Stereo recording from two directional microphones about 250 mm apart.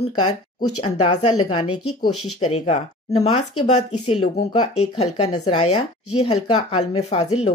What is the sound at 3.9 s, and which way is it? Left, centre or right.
Speech, left.